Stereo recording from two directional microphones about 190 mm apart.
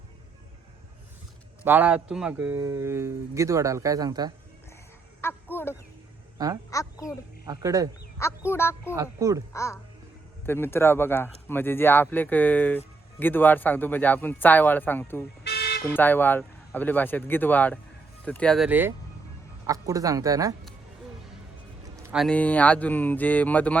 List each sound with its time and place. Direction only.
1.6 s speech: 10° right (ahead or behind)
5.2 s a sound: 10° left (ahead or behind)
6.7 s speech: 15° left (ahead or behind)
7.4 s speech: 20° right (ahead or behind)
8.4 s speech: 15° left (ahead or behind)
8.9 s speech: 15° right (ahead or behind)
9.5 s speech: 15° left (ahead or behind)
15.4 s car alarm: 55° left (ahead or behind)
15.8 s speech: 10° left (ahead or behind); by 20.6 s 20° right (ahead or behind)
22.1 s speech: centre (ahead or behind)